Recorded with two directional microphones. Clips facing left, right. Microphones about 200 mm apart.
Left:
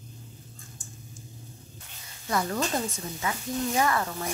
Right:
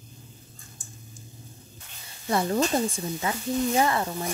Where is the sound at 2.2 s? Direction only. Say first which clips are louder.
Right 4 dB; 30° right (ahead or behind).